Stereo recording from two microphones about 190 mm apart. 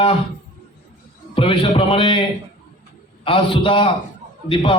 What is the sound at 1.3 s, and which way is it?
A man's voice, 30° left (ahead or behind).